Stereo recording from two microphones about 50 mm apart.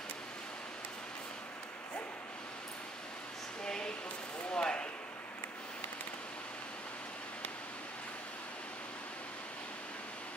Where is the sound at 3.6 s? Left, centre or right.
Centre.